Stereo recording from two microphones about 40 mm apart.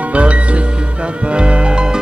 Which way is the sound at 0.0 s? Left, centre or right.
Right.